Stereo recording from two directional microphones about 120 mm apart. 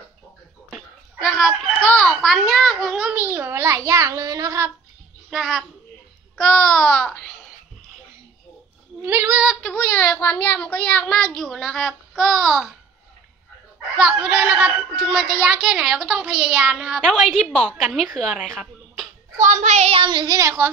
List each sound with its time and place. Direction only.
0.7 s a sound: 10° right (ahead or behind)
1.9 s a child's voice: 5° left (ahead or behind); by 4.7 s 25° right (ahead or behind)
5.3 s a child's voice: centre (ahead or behind)
9.0 s a woman's voice: 15° right (ahead or behind)
9.6 s speech: 10° left (ahead or behind)
13.9 s a woman's voice: 10° right (ahead or behind)
19.3 s a woman's voice: 90° right
19.9 s speech: 40° right (ahead or behind); by 20.7 s 20° right (ahead or behind)